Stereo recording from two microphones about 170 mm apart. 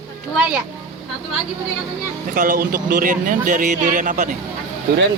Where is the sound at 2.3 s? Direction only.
50° right (ahead or behind).